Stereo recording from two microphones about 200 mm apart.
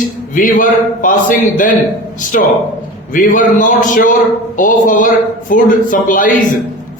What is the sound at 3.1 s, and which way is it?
A man's voice, 40° left (ahead or behind).